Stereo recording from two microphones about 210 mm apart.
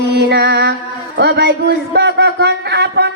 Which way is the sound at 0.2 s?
50° right (ahead or behind).